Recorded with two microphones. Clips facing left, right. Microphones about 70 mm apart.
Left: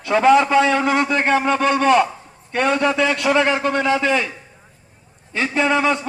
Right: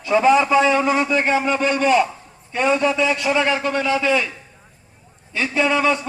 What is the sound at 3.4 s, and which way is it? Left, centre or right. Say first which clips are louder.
Speech: left 2 dB; left.